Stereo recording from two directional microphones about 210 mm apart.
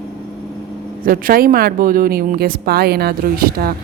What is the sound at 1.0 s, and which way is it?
Speech, 40° right (ahead or behind).